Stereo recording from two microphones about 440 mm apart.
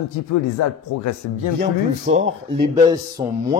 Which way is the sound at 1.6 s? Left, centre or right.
Centre.